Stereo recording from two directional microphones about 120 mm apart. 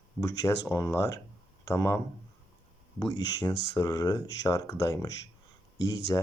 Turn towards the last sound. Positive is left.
turn(degrees=35)  # may be behind; listen again after turning